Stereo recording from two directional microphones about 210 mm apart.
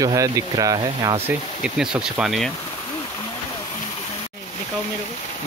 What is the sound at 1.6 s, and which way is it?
Speech, 5° right (ahead or behind).